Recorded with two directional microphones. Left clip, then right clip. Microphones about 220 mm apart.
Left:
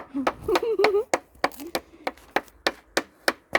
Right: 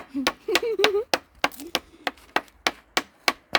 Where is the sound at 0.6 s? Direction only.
10° left (ahead or behind).